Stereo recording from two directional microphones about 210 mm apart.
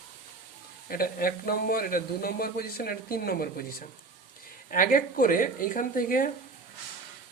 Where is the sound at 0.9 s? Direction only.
45° left (ahead or behind).